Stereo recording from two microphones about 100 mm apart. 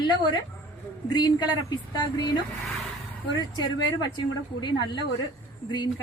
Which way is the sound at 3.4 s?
45° left (ahead or behind).